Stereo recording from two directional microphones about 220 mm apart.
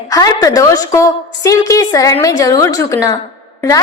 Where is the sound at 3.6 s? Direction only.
15° left (ahead or behind).